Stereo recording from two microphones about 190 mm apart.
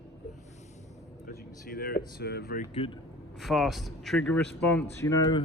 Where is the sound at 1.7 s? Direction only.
50° left (ahead or behind).